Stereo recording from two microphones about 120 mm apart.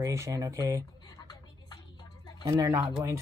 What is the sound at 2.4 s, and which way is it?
Speech, 25° right (ahead or behind).